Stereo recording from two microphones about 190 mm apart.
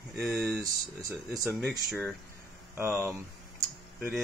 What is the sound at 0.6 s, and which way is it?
Speech, 20° right (ahead or behind).